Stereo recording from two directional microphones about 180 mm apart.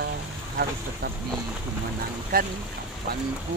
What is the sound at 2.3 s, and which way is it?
Speech, 55° right (ahead or behind).